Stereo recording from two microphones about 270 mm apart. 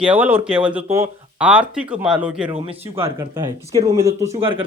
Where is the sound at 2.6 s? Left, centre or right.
Right.